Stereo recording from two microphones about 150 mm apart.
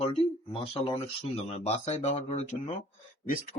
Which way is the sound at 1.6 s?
50° left (ahead or behind).